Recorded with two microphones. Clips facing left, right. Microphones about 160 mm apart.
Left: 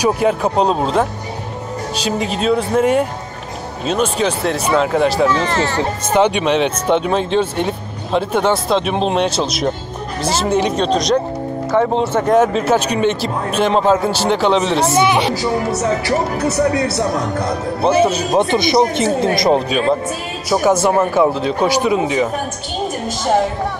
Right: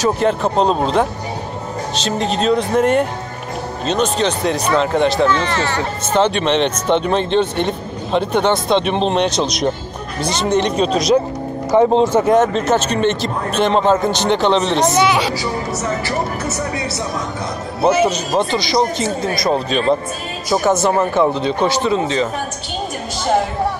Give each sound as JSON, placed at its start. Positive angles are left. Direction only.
{"t": 0.0, "sound": "speech", "side_deg": 10}
{"t": 2.0, "sound": "speech", "side_deg": 10}
{"t": 5.4, "sound": "speech", "side_deg": 40}
{"t": 6.1, "sound": "speech", "side_deg": 10}
{"t": 11.7, "sound": "speech", "side_deg": -15}
{"t": 12.3, "sound": "speech", "side_deg": 5}
{"t": 16.8, "sound": "speech", "side_deg": 60}
{"t": 18.3, "sound": "speech", "side_deg": 20}
{"t": 19.7, "sound": "speech", "side_deg": 5}